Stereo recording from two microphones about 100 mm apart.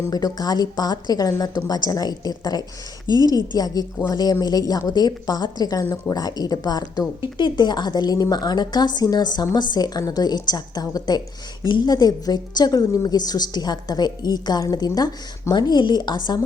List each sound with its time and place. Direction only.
0.1 s a woman's voice: 40° left (ahead or behind)